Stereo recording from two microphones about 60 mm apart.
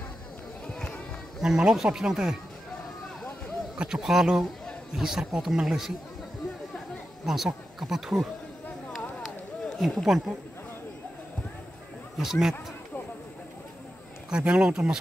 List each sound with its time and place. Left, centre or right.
0.7 s run: centre
1.4 s speech: centre
3.7 s speech: centre
7.2 s speech: centre
9.8 s speech: centre
12.2 s speech: centre
14.3 s speech: centre